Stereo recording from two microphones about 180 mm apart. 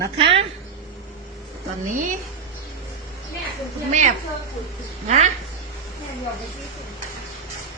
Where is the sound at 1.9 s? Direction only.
45° right (ahead or behind).